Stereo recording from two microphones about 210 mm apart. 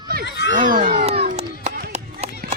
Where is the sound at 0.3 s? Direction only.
55° left (ahead or behind).